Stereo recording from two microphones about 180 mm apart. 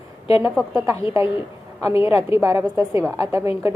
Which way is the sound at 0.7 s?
15° right (ahead or behind).